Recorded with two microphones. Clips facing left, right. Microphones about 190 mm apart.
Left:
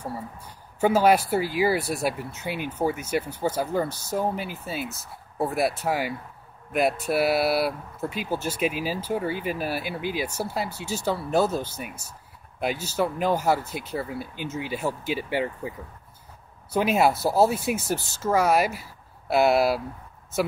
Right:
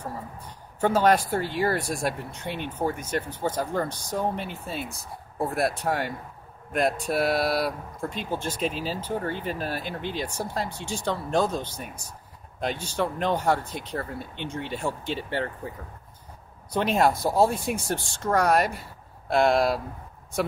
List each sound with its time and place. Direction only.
0.7 s speech: 10° left (ahead or behind)
16.7 s speech: 5° left (ahead or behind)